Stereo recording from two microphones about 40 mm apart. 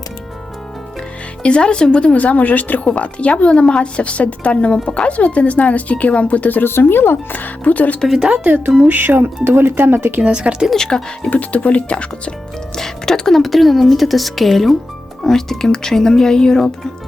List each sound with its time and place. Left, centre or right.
1.4 s speech: left
2.1 s a woman's voice: left
2.8 s a woman's voice: left
6.7 s speech: left
7.3 s a woman's voice: left
8.4 s speech: right
9.6 s speech: right
10.2 s speech: right
10.8 s speech: centre
11.3 s a woman's voice: left
12.7 s speech: centre